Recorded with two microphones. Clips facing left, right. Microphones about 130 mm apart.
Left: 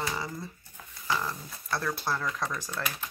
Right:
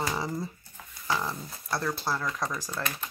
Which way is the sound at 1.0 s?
10° right (ahead or behind).